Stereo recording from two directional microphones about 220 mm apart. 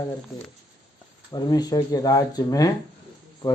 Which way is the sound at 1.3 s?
20° left (ahead or behind).